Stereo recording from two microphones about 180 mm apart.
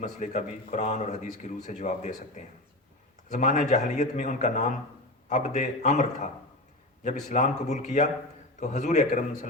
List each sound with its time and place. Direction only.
0.0 s speech: 40° left (ahead or behind)
3.2 s speech: 45° left (ahead or behind)